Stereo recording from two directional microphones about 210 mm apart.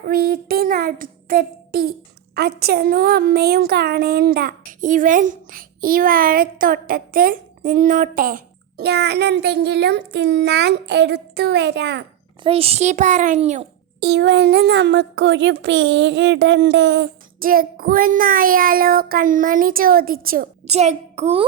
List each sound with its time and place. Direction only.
0.1 s speech: 45° right (ahead or behind)
12.4 s a child's voice: 25° right (ahead or behind)
14.0 s speech: 55° right (ahead or behind)
17.4 s speech: 45° right (ahead or behind)
20.7 s a child's voice: 30° right (ahead or behind)